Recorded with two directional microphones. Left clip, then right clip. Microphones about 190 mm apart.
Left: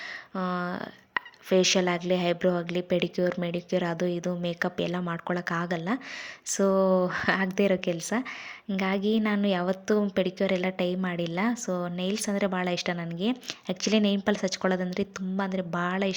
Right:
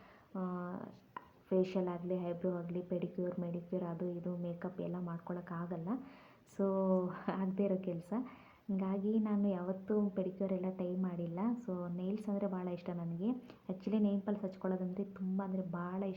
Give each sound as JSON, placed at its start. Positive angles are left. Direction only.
{"t": 0.5, "sound": "a sound", "side_deg": 45}
{"t": 1.5, "sound": "a woman's voice", "side_deg": 25}
{"t": 2.6, "sound": "a woman's voice", "side_deg": 25}
{"t": 4.9, "sound": "speech", "side_deg": 40}
{"t": 5.7, "sound": "speech", "side_deg": 30}
{"t": 7.1, "sound": "a woman's voice", "side_deg": 20}